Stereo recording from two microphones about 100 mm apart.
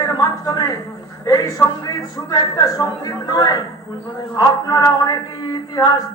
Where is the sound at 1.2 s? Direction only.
35° left (ahead or behind).